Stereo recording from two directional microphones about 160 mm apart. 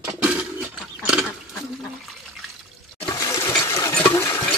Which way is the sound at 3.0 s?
20° left (ahead or behind).